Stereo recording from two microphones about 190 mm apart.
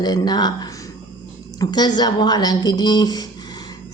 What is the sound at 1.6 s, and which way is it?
A woman's voice, 20° left (ahead or behind).